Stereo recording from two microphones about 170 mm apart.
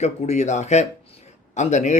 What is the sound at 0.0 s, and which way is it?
Speech, 40° left (ahead or behind).